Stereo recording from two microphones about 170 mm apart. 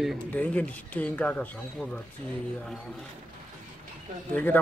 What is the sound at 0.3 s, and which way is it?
Speech, 10° left (ahead or behind).